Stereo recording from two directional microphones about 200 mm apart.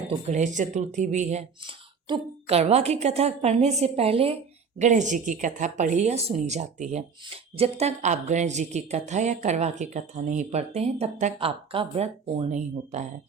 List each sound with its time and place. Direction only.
0.1 s a woman's voice: 35° right (ahead or behind)